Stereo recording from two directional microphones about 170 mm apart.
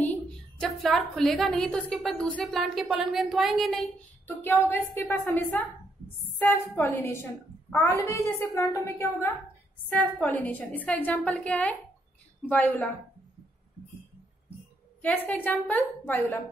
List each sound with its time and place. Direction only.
0.0 s a woman's voice: 5° left (ahead or behind)
4.3 s a woman's voice: 10° left (ahead or behind)
15.0 s a woman's voice: 10° left (ahead or behind)